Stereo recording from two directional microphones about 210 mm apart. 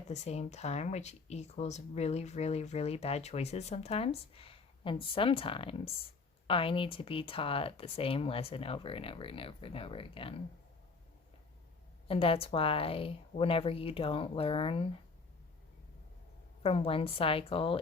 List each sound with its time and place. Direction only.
0.1 s speech: 30° left (ahead or behind)
12.0 s speech: 25° left (ahead or behind)
16.6 s speech: 25° left (ahead or behind)